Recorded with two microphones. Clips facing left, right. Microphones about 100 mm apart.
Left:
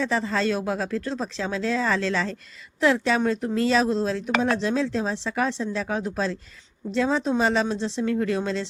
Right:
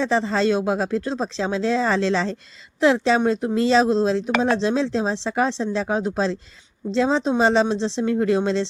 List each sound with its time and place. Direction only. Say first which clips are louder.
0.0 s speech: right 4 dB; 25° right (ahead or behind)